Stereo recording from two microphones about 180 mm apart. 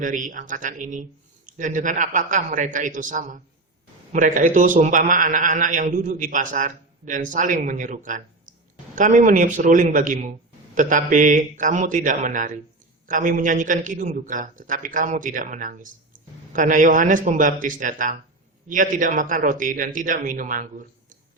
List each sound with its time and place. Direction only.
0.0 s a man's voice: 45° right (ahead or behind)